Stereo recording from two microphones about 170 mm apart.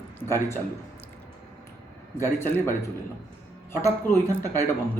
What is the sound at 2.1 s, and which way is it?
Speech, 15° left (ahead or behind).